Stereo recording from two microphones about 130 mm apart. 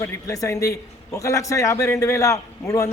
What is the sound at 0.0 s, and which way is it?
A man's voice, 25° left (ahead or behind).